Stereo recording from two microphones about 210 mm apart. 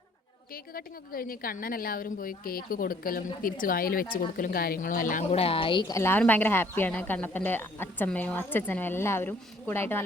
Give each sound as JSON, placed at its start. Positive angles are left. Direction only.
{"t": 0.5, "sound": "a woman's voice", "side_deg": 45}
{"t": 6.0, "sound": "speech", "side_deg": 10}